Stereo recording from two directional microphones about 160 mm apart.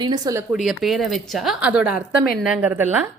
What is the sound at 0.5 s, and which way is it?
A woman's voice, centre (ahead or behind).